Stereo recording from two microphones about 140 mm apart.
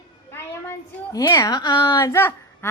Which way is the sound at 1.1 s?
25° left (ahead or behind).